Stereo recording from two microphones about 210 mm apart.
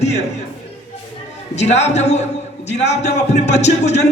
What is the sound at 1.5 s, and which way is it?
Music, 30° left (ahead or behind).